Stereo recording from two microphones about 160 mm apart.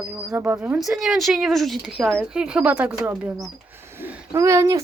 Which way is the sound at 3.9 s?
15° right (ahead or behind).